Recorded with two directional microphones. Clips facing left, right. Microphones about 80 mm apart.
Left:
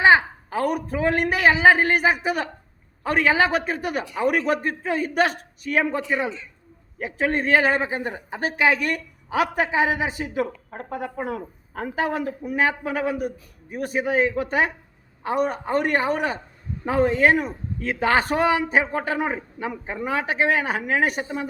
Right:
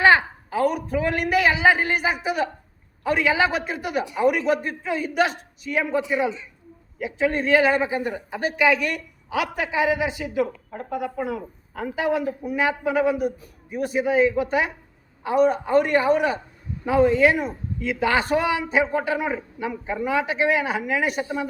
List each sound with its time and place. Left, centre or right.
0.5 s a man's voice: left
6.0 s a woman's voice: centre
7.0 s a man's voice: left